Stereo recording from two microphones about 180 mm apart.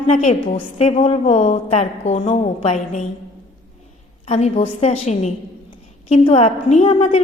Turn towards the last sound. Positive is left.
turn(degrees=35)  # may be behind; listen again after turning